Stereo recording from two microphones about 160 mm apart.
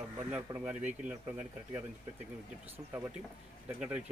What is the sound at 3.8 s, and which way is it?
Speech, 5° right (ahead or behind).